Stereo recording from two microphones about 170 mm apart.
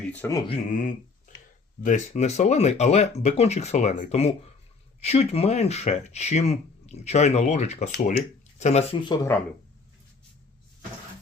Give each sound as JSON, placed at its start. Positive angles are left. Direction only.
{"t": 0.0, "sound": "speech", "side_deg": 10}
{"t": 0.7, "sound": "speech", "side_deg": 50}
{"t": 9.0, "sound": "speech", "side_deg": 25}